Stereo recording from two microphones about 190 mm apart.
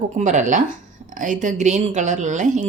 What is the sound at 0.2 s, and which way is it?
A woman's voice, 40° right (ahead or behind).